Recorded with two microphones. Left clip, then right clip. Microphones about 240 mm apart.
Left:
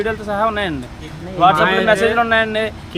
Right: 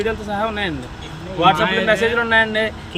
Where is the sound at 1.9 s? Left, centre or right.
Centre.